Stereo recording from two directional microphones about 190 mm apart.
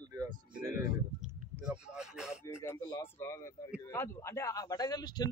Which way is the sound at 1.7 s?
5° right (ahead or behind).